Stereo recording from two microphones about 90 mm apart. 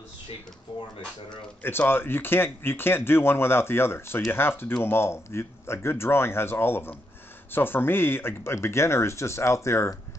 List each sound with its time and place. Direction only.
1.6 s speech: 25° left (ahead or behind)